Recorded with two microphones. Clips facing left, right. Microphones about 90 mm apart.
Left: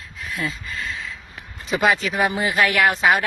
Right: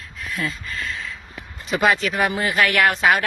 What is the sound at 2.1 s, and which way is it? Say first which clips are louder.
Speech: even; 15° left (ahead or behind).